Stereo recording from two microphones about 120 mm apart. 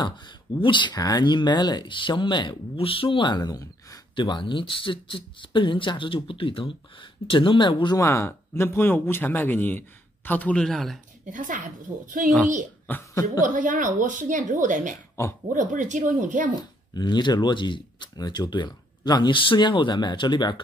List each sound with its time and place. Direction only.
0.6 s speech: 40° left (ahead or behind)
4.1 s speech: 40° left (ahead or behind)
8.0 s speech: 25° left (ahead or behind); by 11.0 s 5° left (ahead or behind)
11.2 s speech: 90° right
13.1 s a woman's voice: 30° left (ahead or behind)
13.4 s speech: 90° right
16.9 s speech: 40° left (ahead or behind)